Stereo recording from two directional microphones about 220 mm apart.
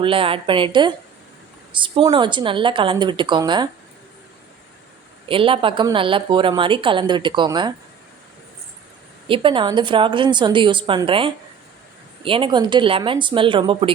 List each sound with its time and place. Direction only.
0.0 s a woman's voice: 25° right (ahead or behind)
5.3 s a woman's voice: 25° right (ahead or behind)
9.2 s a woman's voice: 25° right (ahead or behind)